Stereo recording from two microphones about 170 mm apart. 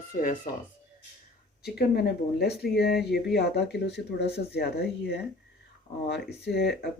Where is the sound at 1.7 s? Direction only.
75° left (ahead or behind).